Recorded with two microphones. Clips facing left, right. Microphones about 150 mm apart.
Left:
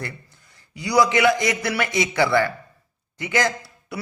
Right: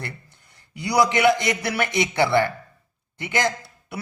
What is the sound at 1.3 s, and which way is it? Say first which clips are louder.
A man's voice: even; 20° right (ahead or behind).